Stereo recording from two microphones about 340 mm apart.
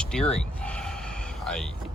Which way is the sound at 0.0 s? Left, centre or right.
Centre.